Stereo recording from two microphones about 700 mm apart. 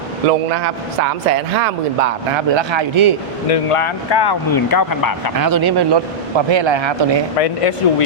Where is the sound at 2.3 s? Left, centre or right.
Right.